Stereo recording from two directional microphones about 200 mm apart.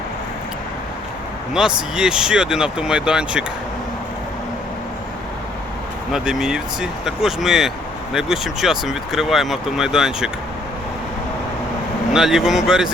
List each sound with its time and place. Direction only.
1.5 s speech: 5° right (ahead or behind)
6.1 s speech: centre (ahead or behind)
12.1 s speech: 5° right (ahead or behind)